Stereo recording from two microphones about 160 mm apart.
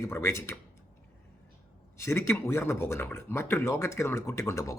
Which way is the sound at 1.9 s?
15° left (ahead or behind).